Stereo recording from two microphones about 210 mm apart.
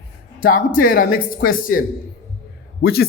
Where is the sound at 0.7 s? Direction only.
45° left (ahead or behind).